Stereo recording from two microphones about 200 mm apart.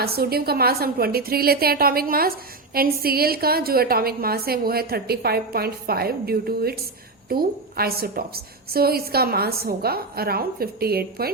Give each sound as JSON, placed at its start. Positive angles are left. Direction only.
{"t": 0.0, "sound": "a woman's voice", "side_deg": -50}